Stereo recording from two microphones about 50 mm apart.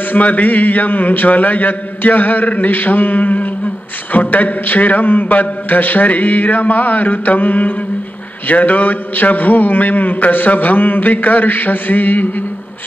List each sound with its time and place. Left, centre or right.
0.1 s a man's voice: left